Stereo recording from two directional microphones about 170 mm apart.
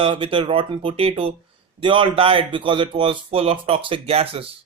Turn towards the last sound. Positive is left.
turn(degrees=-35)  # may be behind; listen again after turning